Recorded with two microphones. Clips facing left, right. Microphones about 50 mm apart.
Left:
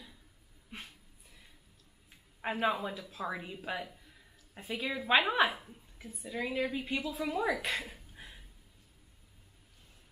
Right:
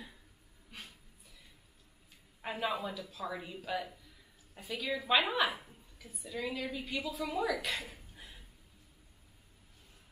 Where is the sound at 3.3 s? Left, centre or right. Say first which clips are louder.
Left 1 dB; centre.